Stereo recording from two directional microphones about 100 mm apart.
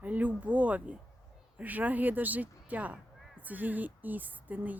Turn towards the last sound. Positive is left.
turn(degrees=-15)  # may be behind; listen again after turning